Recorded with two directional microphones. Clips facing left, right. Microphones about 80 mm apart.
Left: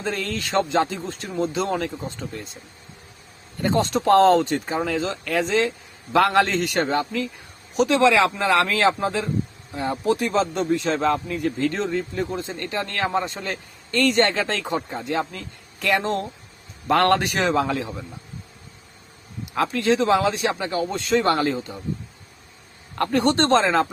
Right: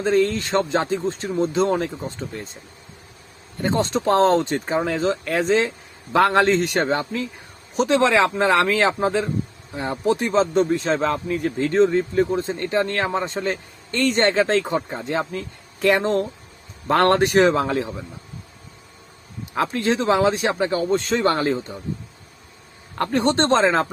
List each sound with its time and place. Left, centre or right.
0.0 s speech: right
3.6 s a man's voice: right
19.5 s speech: right
23.0 s a man's voice: right